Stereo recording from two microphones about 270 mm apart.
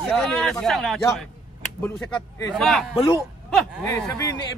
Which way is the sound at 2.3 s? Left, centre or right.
Centre.